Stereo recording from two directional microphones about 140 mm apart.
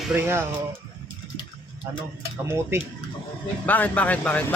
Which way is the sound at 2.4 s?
20° right (ahead or behind).